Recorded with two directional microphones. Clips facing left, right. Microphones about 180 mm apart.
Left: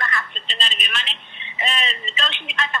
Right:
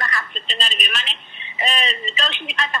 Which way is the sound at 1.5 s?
35° right (ahead or behind).